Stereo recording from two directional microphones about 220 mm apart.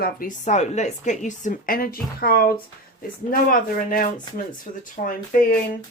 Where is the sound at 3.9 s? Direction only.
40° left (ahead or behind).